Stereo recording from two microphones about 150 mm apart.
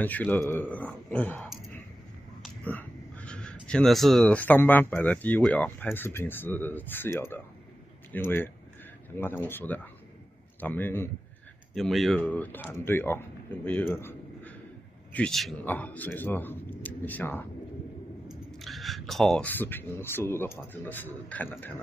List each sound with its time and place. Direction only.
0.0 s speech: 10° left (ahead or behind)
2.6 s a sound: 10° left (ahead or behind)
3.6 s speech: 5° left (ahead or behind)
11.7 s speech: centre (ahead or behind)
13.9 s a sound: 15° left (ahead or behind)
15.1 s speech: 5° left (ahead or behind)
18.3 s speech: centre (ahead or behind)